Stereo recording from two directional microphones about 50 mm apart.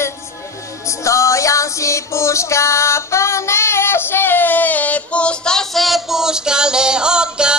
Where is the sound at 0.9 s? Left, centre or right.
Left.